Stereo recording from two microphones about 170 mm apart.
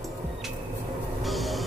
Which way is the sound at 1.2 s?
Centre (ahead or behind).